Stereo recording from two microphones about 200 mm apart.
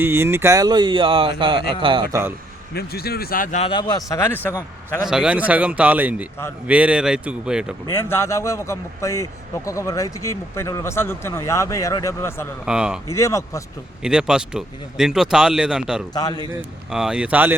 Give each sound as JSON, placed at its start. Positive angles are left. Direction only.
{"t": 0.0, "sound": "speech", "side_deg": -10}
{"t": 2.7, "sound": "speech", "side_deg": 50}
{"t": 3.7, "sound": "speech", "side_deg": 20}
{"t": 5.0, "sound": "speech", "side_deg": -5}
{"t": 7.9, "sound": "speech", "side_deg": 10}
{"t": 12.6, "sound": "speech", "side_deg": -5}
{"t": 13.1, "sound": "speech", "side_deg": 15}
{"t": 14.0, "sound": "speech", "side_deg": -5}
{"t": 16.1, "sound": "a man's voice", "side_deg": 20}
{"t": 16.5, "sound": "speech", "side_deg": -5}